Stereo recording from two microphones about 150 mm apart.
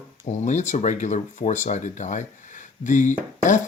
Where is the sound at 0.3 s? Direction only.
50° left (ahead or behind).